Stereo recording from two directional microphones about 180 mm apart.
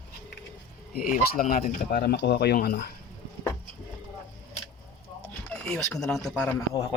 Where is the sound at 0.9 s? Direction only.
50° left (ahead or behind).